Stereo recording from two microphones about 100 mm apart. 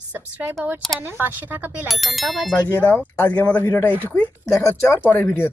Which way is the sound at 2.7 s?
20° left (ahead or behind).